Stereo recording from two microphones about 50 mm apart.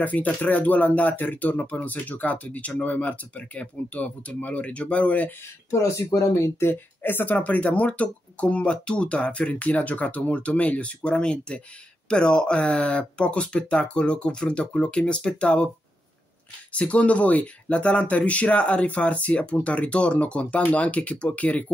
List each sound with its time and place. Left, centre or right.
0.0 s speech: left
5.7 s speech: left
7.3 s speech: left
16.7 s speech: left